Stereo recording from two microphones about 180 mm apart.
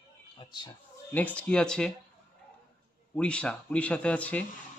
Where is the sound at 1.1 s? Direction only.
10° left (ahead or behind).